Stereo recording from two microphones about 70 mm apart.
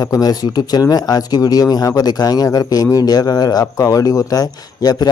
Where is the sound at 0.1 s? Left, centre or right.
Left.